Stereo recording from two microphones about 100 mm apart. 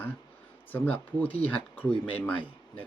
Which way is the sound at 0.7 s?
15° left (ahead or behind).